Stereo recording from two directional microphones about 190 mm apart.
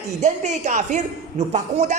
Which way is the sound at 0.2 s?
35° right (ahead or behind).